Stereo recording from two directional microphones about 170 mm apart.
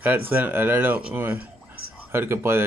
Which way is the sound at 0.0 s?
10° right (ahead or behind).